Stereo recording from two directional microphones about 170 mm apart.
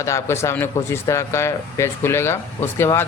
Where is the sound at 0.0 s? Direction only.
15° left (ahead or behind).